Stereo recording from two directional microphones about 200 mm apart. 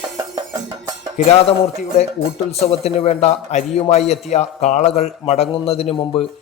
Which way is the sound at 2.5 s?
30° left (ahead or behind).